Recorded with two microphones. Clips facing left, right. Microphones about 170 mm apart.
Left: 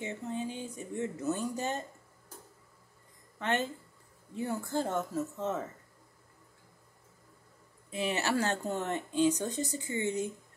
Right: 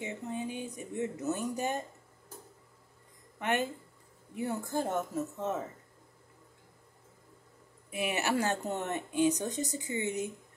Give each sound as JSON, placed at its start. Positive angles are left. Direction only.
{"t": 0.0, "sound": "speech", "side_deg": -15}
{"t": 3.3, "sound": "speech", "side_deg": -15}
{"t": 7.9, "sound": "speech", "side_deg": -15}